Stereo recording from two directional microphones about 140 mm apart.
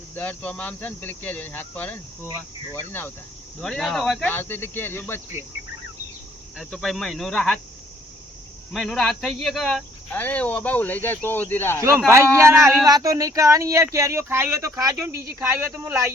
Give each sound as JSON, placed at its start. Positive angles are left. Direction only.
{"t": 0.2, "sound": "speech", "side_deg": 10}
{"t": 3.6, "sound": "speech", "side_deg": 0}
{"t": 4.3, "sound": "speech", "side_deg": 15}
{"t": 6.7, "sound": "speech", "side_deg": 0}
{"t": 8.7, "sound": "speech", "side_deg": 5}
{"t": 10.1, "sound": "speech", "side_deg": 10}
{"t": 11.8, "sound": "speech", "side_deg": -20}